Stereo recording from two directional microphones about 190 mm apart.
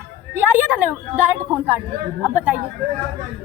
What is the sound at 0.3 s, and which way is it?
A woman's voice, 10° right (ahead or behind).